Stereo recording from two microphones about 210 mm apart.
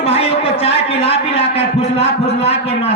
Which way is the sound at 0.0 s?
30° left (ahead or behind).